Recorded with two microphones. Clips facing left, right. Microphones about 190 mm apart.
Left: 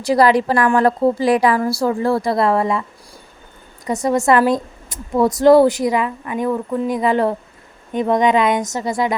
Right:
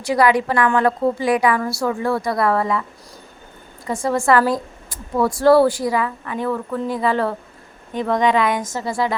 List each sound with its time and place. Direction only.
0.0 s a woman's voice: 35° left (ahead or behind)
3.9 s a woman's voice: 15° left (ahead or behind)